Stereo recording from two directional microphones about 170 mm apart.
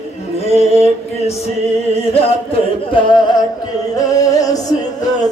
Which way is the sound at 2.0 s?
35° left (ahead or behind).